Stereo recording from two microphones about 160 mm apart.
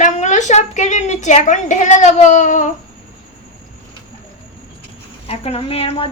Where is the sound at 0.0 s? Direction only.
50° left (ahead or behind).